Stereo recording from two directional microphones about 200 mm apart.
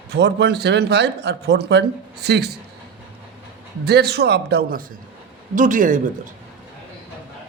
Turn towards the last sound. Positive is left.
turn(degrees=-40)  # may be behind; listen again after turning